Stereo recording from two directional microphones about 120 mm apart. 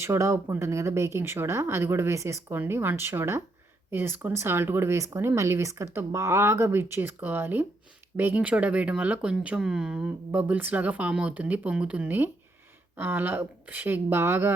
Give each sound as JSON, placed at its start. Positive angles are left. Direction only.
{"t": 0.0, "sound": "speech", "side_deg": -25}